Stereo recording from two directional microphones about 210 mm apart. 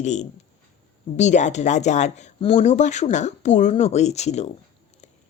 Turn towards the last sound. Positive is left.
turn(degrees=30)  # may be behind; listen again after turning